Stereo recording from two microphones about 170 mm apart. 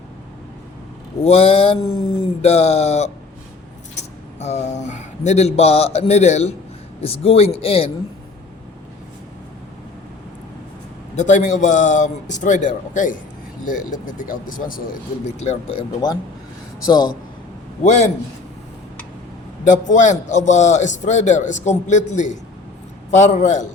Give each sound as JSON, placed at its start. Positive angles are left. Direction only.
{"t": 1.2, "sound": "speech", "side_deg": 35}
{"t": 3.9, "sound": "a sound", "side_deg": 40}
{"t": 7.0, "sound": "speech", "side_deg": 35}
{"t": 11.2, "sound": "a man's voice", "side_deg": 45}
{"t": 15.4, "sound": "speech", "side_deg": 40}
{"t": 17.8, "sound": "a man's voice", "side_deg": 45}
{"t": 19.6, "sound": "a man's voice", "side_deg": 45}